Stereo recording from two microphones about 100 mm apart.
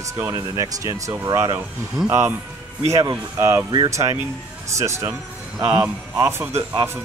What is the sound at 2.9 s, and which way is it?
Speech, 30° right (ahead or behind).